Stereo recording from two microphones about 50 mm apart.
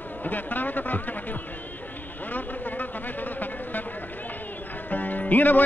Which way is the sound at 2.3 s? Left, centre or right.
Left.